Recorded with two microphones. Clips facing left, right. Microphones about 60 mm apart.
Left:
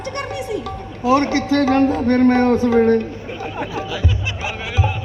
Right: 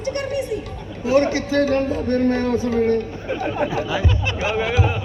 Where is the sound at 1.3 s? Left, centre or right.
Left.